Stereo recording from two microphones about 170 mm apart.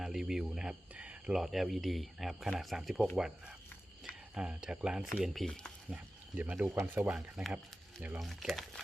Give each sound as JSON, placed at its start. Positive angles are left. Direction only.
{"t": 0.0, "sound": "speech", "side_deg": -5}